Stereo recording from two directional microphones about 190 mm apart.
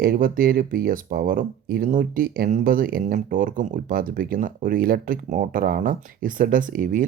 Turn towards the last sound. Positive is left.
turn(degrees=-45)  # may be behind; listen again after turning